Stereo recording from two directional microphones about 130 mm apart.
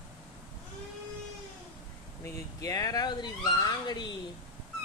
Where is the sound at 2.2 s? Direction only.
25° left (ahead or behind).